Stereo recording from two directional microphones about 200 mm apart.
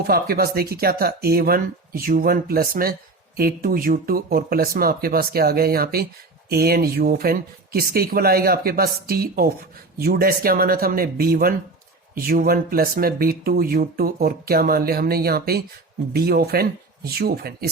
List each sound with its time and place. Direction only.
0.0 s speech: 50° right (ahead or behind)